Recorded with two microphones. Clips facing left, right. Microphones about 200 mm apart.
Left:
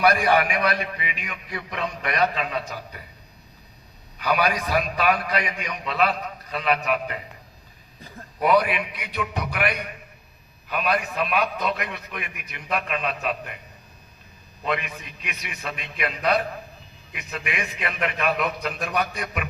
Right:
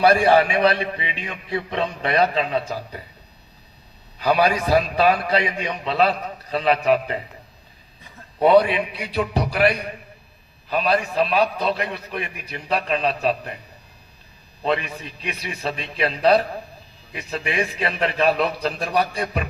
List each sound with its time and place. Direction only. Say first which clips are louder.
0.0 s a man's voice: right 4 dB; 30° right (ahead or behind)
4.2 s a man's voice: right 4 dB; 30° right (ahead or behind)
8.4 s a man's voice: right 5 dB; 30° right (ahead or behind)
14.6 s a man's voice: right 5 dB; 30° right (ahead or behind)